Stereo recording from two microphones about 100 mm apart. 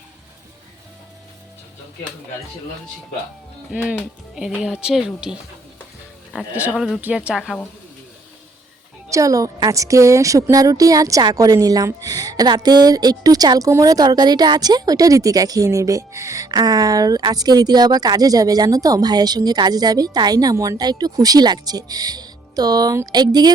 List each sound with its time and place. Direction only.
4.4 s a woman's voice: 5° right (ahead or behind)
6.5 s a woman's voice: 15° right (ahead or behind)
9.0 s a woman's voice: 35° right (ahead or behind)